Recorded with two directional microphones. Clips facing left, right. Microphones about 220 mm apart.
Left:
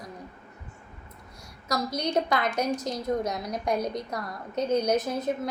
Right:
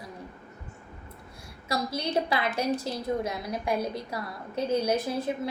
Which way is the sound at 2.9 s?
30° right (ahead or behind).